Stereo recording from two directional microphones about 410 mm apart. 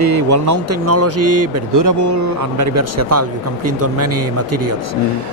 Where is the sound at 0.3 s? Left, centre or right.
Right.